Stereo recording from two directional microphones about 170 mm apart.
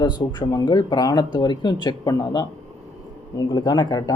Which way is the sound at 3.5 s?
25° left (ahead or behind).